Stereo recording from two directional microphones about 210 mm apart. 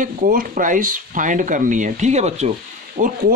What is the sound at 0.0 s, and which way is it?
Speech, 40° right (ahead or behind).